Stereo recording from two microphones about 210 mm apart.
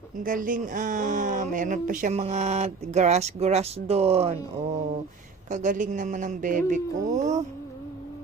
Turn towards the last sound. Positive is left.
turn(degrees=-35)  # may be behind; listen again after turning